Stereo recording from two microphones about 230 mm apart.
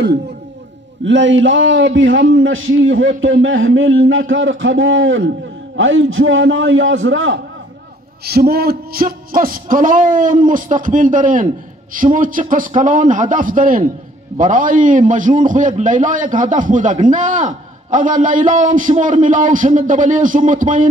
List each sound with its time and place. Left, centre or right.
1.0 s a man's voice: right
8.3 s a man's voice: right